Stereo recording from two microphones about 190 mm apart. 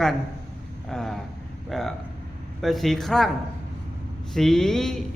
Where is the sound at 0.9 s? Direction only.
Centre (ahead or behind).